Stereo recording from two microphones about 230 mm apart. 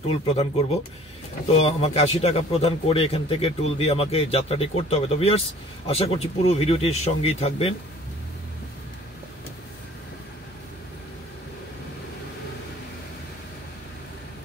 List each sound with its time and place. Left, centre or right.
0.3 s speech: left